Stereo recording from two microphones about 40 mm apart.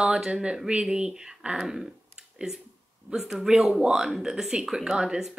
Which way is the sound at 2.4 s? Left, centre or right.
Right.